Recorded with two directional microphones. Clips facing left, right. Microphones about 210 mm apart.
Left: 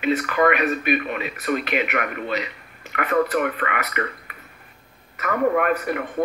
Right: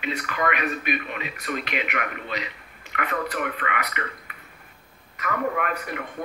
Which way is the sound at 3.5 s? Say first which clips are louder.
Left 3 dB; 45° left (ahead or behind).